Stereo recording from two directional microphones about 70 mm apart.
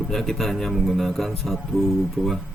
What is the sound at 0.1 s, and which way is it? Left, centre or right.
Speech, centre.